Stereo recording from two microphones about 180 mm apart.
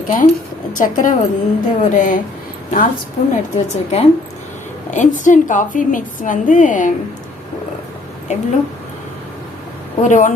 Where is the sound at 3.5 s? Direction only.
40° left (ahead or behind).